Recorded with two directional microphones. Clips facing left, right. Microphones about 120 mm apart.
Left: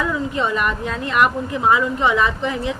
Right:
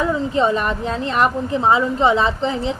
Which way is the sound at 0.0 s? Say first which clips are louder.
Right 4 dB; 35° right (ahead or behind).